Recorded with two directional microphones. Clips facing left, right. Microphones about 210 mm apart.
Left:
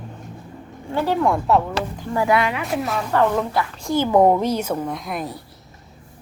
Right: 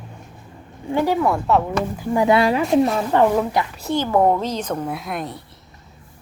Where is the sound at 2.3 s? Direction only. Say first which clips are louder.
Right 7 dB; 35° right (ahead or behind).